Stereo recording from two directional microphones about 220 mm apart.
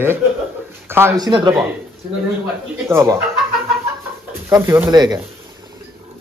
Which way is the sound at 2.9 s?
10° right (ahead or behind).